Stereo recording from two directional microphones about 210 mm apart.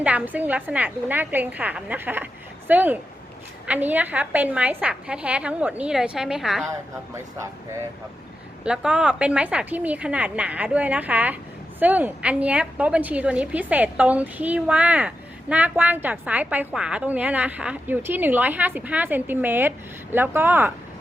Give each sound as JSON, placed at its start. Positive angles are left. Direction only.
{"t": 0.0, "sound": "a woman's voice", "side_deg": -5}
{"t": 8.6, "sound": "a woman's voice", "side_deg": -5}